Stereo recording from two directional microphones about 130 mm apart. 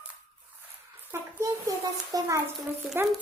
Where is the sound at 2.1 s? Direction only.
30° right (ahead or behind).